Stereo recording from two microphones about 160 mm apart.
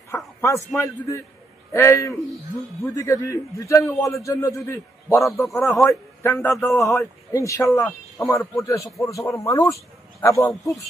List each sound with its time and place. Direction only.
0.1 s a sound: 15° left (ahead or behind)
0.7 s a man's voice: 20° left (ahead or behind)
10.5 s a man's voice: centre (ahead or behind)